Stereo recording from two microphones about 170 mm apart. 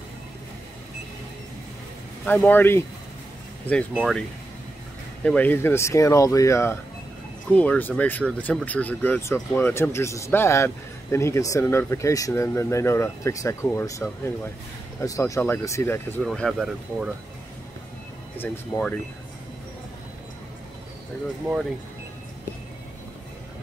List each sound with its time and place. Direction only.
2.2 s speech: 10° left (ahead or behind)
5.2 s speech: 10° left (ahead or behind)
16.2 s speech: centre (ahead or behind)
18.4 s speech: 10° left (ahead or behind)